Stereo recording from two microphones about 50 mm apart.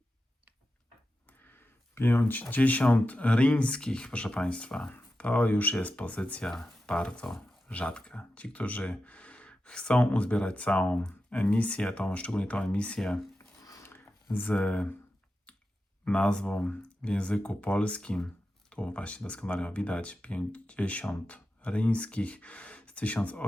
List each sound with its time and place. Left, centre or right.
1.3 s a sound: left
2.8 s speech: left
6.4 s speech: centre
6.8 s speech: left
13.8 s a sound: left
14.3 s speech: left
15.5 s clicking: left
16.0 s speech: centre